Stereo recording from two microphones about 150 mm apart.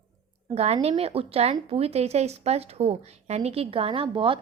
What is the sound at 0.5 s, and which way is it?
A woman's voice, 45° right (ahead or behind).